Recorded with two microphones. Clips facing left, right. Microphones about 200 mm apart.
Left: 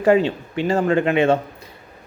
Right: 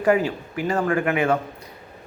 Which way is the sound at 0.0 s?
25° left (ahead or behind).